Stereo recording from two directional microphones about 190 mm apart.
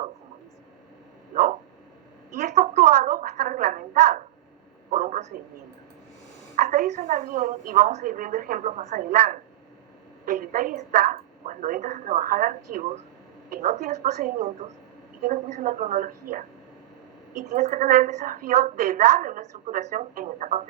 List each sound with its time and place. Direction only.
2.6 s a sound: 45° right (ahead or behind)
6.6 s a woman's voice: 40° right (ahead or behind)
17.5 s a woman's voice: 40° right (ahead or behind)